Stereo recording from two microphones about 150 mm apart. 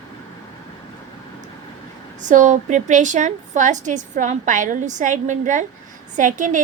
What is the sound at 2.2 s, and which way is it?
A woman's voice, 55° right (ahead or behind).